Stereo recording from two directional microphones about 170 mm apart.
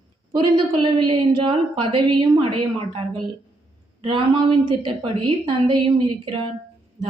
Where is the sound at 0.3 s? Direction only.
30° right (ahead or behind).